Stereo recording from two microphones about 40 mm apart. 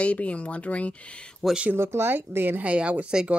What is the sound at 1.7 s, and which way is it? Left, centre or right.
Speech, right.